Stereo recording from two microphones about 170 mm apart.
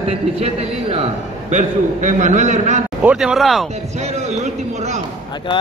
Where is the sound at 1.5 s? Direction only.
45° right (ahead or behind).